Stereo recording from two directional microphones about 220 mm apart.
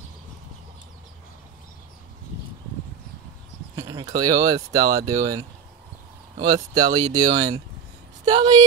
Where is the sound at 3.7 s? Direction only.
15° right (ahead or behind).